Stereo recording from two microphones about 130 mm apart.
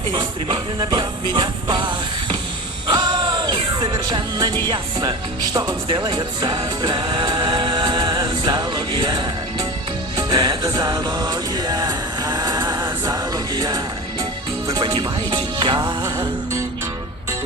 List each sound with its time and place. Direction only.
0.1 s music: 40° right (ahead or behind)